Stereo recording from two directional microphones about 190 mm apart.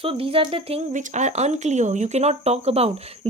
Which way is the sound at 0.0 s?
30° right (ahead or behind).